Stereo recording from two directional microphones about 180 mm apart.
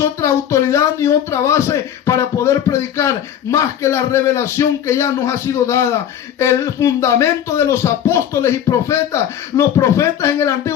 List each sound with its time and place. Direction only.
0.0 s speech: 15° left (ahead or behind)